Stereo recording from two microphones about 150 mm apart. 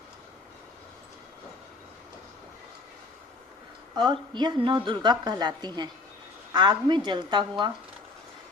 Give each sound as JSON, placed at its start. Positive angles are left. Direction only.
{"t": 3.9, "sound": "a woman's voice", "side_deg": -30}